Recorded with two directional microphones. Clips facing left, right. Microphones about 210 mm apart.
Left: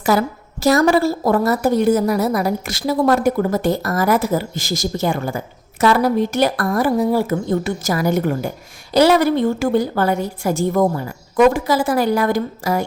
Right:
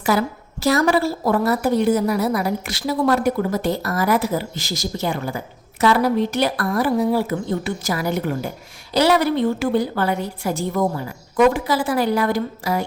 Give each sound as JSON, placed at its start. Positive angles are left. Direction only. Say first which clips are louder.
{"t": 0.0, "sound": "a woman's voice", "louder": "left 2 dB", "side_deg": 45}